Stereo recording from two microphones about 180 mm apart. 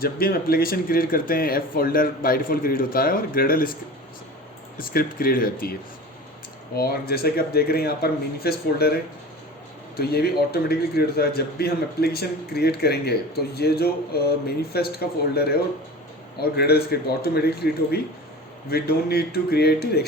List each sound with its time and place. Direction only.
0.0 s speech: 55° left (ahead or behind)
4.8 s speech: 55° left (ahead or behind)
6.7 s a man's voice: 60° left (ahead or behind)
10.0 s a man's voice: 60° left (ahead or behind)